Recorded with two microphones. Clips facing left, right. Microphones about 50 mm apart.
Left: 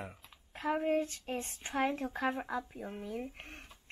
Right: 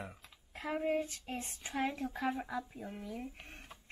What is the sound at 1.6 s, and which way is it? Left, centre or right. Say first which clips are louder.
Speech: left 3 dB; left.